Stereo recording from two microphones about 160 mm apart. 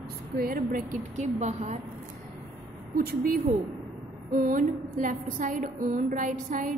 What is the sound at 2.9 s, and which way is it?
A woman's voice, 65° right (ahead or behind).